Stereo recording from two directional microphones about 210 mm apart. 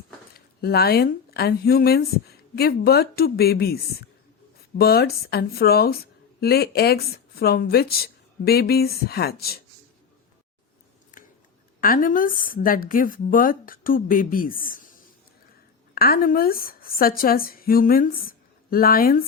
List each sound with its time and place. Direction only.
0.3 s speech: 50° left (ahead or behind)
11.1 s a sound: 40° left (ahead or behind)
11.8 s a woman's voice: 40° left (ahead or behind)